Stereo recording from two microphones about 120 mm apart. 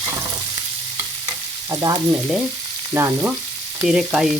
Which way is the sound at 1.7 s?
30° right (ahead or behind).